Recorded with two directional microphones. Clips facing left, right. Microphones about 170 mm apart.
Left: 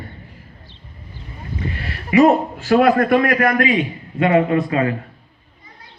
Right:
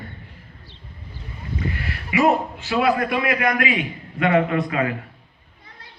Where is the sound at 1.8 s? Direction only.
40° left (ahead or behind).